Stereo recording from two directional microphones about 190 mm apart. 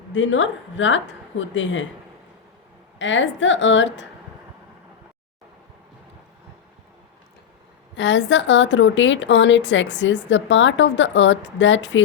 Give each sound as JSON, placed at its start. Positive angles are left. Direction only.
{"t": 0.1, "sound": "a woman's voice", "side_deg": 90}
{"t": 3.0, "sound": "a woman's voice", "side_deg": 80}
{"t": 7.9, "sound": "a woman's voice", "side_deg": 75}